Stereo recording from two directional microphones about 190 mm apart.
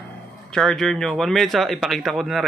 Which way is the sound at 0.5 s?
5° left (ahead or behind).